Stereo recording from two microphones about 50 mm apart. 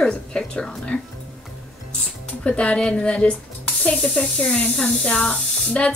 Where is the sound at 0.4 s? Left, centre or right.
Centre.